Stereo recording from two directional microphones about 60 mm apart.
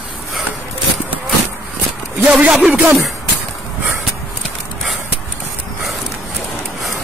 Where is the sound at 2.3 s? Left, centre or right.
Right.